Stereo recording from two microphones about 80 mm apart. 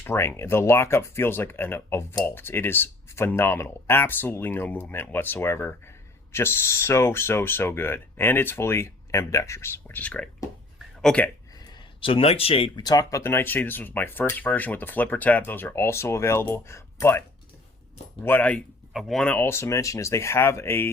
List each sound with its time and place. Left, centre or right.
0.0 s speech: left; by 11.3 s centre
11.6 s a sound: left
12.5 s speech: left
13.2 s speech: left
18.2 s speech: left
18.9 s speech: centre
19.4 s speech: left